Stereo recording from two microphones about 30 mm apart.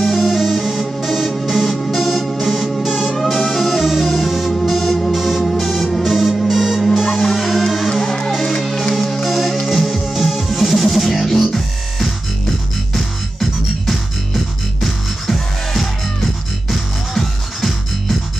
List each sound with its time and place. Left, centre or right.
0.0 s music: centre
4.6 s music: centre
5.0 s music: centre
7.9 s music: centre